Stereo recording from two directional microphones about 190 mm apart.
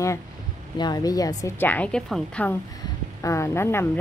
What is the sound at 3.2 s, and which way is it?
Speech, 15° left (ahead or behind).